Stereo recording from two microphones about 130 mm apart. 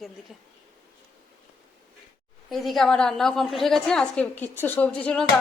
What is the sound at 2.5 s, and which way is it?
A woman's voice, centre (ahead or behind).